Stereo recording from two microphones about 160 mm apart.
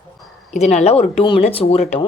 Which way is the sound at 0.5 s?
45° left (ahead or behind).